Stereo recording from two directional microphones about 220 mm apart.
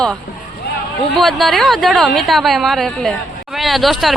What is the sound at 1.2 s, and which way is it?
A woman's voice, centre (ahead or behind).